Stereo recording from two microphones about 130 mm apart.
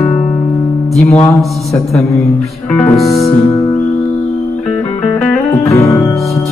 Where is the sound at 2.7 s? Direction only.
10° left (ahead or behind).